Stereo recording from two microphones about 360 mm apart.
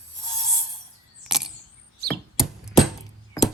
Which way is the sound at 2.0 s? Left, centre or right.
Right.